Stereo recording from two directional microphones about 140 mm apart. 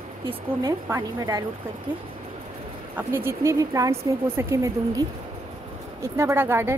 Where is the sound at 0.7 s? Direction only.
20° right (ahead or behind).